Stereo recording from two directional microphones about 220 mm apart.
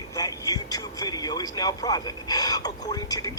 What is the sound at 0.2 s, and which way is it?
Music, 15° left (ahead or behind).